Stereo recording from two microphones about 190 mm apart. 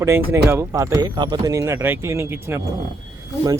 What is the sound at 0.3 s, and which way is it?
Speech, 10° right (ahead or behind).